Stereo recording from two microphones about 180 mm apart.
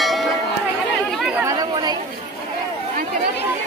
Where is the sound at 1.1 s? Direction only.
10° right (ahead or behind).